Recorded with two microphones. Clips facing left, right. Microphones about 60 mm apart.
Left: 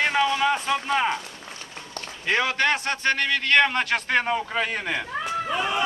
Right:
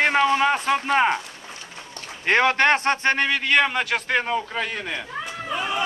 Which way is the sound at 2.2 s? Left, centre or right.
Right.